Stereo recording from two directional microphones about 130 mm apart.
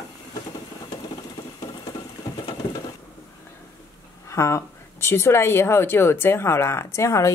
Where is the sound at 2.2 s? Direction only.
30° left (ahead or behind).